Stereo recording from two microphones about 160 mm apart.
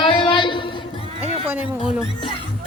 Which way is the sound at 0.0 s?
35° left (ahead or behind).